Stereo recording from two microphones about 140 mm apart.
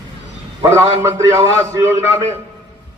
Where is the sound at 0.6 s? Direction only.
20° right (ahead or behind).